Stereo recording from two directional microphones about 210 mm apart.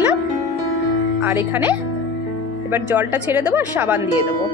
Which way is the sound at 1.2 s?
10° right (ahead or behind).